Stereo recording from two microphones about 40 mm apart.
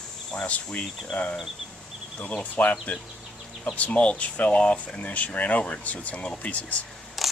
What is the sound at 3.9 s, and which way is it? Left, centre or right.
Speech, left.